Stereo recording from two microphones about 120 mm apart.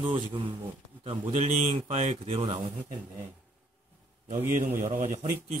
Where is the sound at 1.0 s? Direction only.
55° right (ahead or behind).